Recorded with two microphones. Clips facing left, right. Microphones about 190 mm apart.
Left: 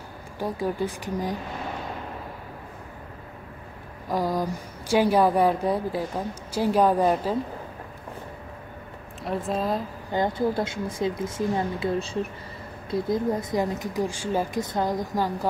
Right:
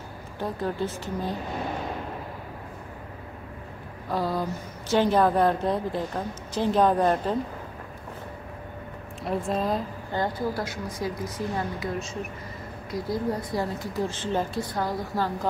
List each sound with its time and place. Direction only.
0.4 s a woman's voice: 10° left (ahead or behind)
4.1 s a woman's voice: 15° left (ahead or behind)
9.2 s speech: centre (ahead or behind)
10.1 s speech: 20° left (ahead or behind)
12.9 s a woman's voice: 20° left (ahead or behind)